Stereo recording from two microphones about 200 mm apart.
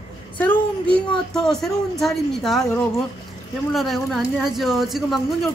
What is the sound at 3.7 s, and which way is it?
Speech, centre (ahead or behind).